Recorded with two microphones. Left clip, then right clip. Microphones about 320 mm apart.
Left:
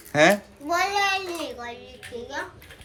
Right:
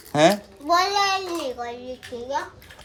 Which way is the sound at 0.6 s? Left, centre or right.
Right.